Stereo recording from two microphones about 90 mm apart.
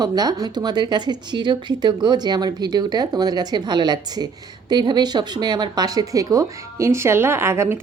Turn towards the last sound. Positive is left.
turn(degrees=-30)  # may be behind; listen again after turning